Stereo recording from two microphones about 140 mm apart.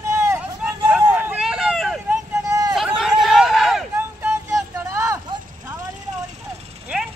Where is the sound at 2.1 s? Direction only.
25° right (ahead or behind).